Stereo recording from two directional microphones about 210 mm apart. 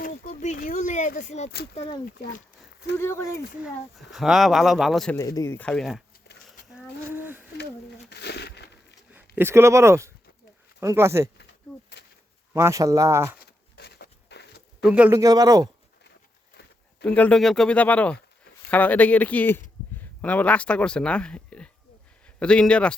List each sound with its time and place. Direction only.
0.3 s speech: 35° left (ahead or behind)
3.0 s speech: 10° left (ahead or behind)
4.1 s speech: centre (ahead or behind)
5.1 s speech: 15° left (ahead or behind)
6.7 s a sound: 10° right (ahead or behind)
8.0 s a sound: 50° left (ahead or behind)
9.1 s a man's voice: 10° right (ahead or behind)
12.5 s a man's voice: 15° right (ahead or behind)
13.4 s a sound: 50° left (ahead or behind)
14.8 s a man's voice: 5° right (ahead or behind)
17.0 s speech: 5° left (ahead or behind)